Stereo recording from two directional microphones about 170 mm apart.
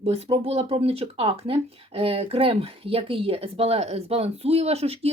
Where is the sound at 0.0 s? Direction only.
35° right (ahead or behind).